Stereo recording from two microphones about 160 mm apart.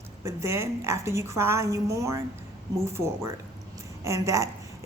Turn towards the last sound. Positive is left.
turn(degrees=-20)  # may be behind; listen again after turning